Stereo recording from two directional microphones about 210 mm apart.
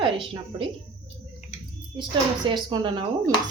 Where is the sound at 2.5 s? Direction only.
20° right (ahead or behind).